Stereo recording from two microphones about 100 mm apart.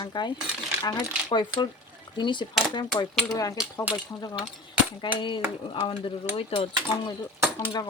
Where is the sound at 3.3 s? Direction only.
35° left (ahead or behind).